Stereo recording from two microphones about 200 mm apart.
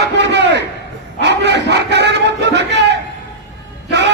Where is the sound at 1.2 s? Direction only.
60° right (ahead or behind).